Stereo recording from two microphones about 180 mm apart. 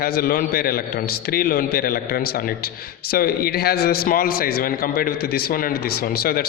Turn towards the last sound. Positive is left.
turn(degrees=55)  # may be behind; listen again after turning